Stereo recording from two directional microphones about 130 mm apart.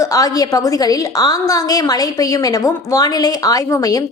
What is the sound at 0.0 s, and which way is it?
A woman's voice, 25° left (ahead or behind).